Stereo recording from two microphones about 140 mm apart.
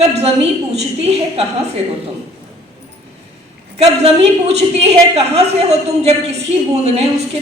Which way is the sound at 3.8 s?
50° right (ahead or behind).